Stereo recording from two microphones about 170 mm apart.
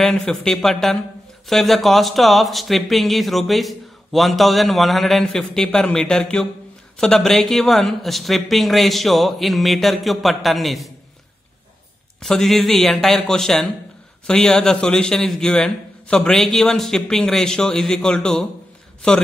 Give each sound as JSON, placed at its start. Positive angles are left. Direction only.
{"t": 0.0, "sound": "speech", "side_deg": 5}
{"t": 12.2, "sound": "speech", "side_deg": 0}